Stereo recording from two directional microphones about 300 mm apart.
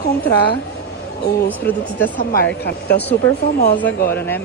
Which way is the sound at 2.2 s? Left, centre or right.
Left.